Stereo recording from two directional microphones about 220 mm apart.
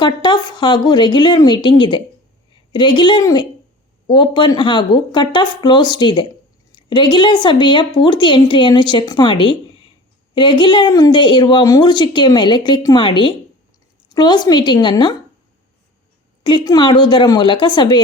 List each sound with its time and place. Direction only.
0.0 s speech: 20° left (ahead or behind)
16.4 s speech: 20° left (ahead or behind)